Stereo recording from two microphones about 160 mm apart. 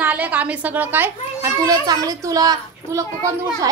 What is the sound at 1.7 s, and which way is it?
A child's voice, 25° right (ahead or behind).